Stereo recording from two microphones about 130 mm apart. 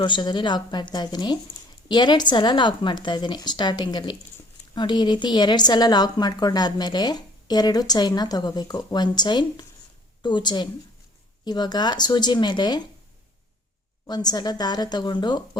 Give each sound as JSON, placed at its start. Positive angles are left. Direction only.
{"t": 0.0, "sound": "a woman's voice", "side_deg": 35}
{"t": 14.1, "sound": "a woman's voice", "side_deg": 30}